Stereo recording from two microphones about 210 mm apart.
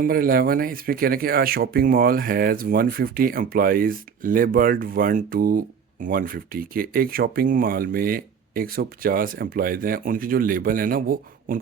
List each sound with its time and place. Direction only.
0.0 s speech: 45° right (ahead or behind)